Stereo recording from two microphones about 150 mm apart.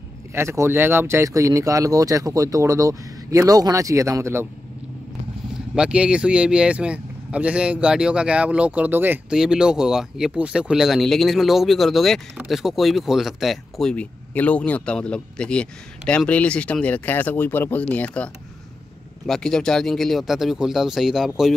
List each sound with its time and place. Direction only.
0.3 s speech: 15° right (ahead or behind)
5.8 s speech: 5° right (ahead or behind)